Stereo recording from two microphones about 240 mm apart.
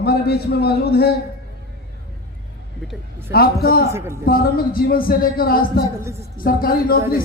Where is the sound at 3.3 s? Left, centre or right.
Left.